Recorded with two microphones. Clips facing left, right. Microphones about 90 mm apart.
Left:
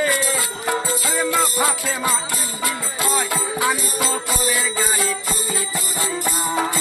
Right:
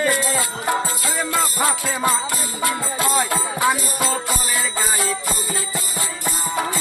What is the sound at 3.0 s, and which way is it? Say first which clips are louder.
Music: right 1 dB; 15° right (ahead or behind).